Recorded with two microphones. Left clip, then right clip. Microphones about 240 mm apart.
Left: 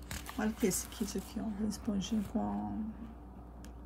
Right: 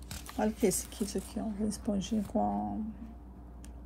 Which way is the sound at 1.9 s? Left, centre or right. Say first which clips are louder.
Right 4 dB; centre.